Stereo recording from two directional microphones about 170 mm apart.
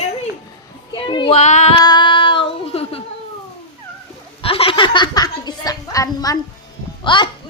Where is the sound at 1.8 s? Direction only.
25° left (ahead or behind).